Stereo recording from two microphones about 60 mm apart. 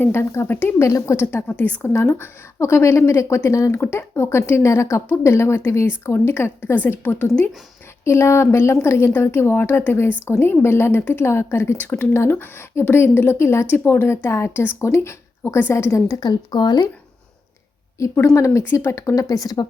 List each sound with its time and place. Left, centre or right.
0.0 s speech: left
0.8 s a woman's voice: left
1.5 s a woman's voice: left
1.8 s a woman's voice: left
6.7 s speech: left
8.0 s a woman's voice: left
18.0 s a woman's voice: left
18.6 s speech: left
18.9 s speech: left